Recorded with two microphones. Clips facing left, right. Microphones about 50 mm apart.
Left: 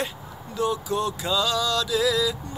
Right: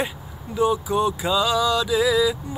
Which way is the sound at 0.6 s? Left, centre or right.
Centre.